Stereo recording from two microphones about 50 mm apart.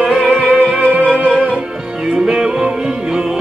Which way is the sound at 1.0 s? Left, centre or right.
Left.